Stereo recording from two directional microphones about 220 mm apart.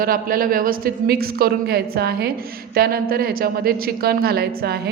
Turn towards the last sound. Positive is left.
turn(degrees=-45)  # may be behind; listen again after turning